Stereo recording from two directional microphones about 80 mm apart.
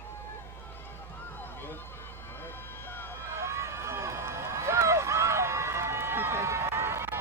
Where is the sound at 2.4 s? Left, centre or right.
Left.